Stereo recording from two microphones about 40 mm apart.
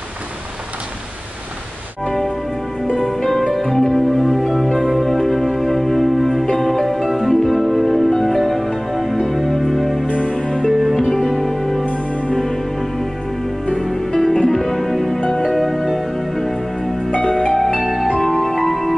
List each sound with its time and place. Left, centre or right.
2.0 s music: centre
10.0 s music: left
10.3 s music: centre
10.7 s music: centre
11.8 s music: left
13.7 s music: centre